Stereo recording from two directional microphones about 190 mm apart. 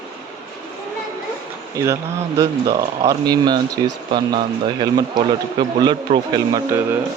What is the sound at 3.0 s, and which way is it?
A man's voice, 20° right (ahead or behind).